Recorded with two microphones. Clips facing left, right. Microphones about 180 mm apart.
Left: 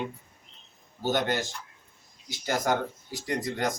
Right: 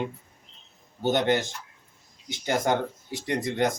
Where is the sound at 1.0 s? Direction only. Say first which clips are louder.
Right 4 dB; 25° right (ahead or behind).